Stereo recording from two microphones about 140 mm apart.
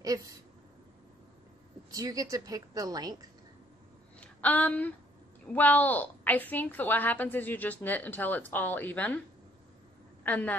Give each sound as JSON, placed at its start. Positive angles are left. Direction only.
{"t": 0.0, "sound": "a woman's voice", "side_deg": -25}
{"t": 2.0, "sound": "a woman's voice", "side_deg": -25}
{"t": 4.2, "sound": "a woman's voice", "side_deg": 10}
{"t": 10.2, "sound": "a woman's voice", "side_deg": 10}